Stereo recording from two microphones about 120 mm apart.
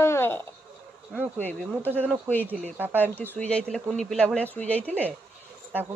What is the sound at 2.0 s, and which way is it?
Speech, 15° left (ahead or behind).